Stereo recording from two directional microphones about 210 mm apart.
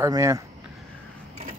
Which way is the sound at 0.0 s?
15° right (ahead or behind).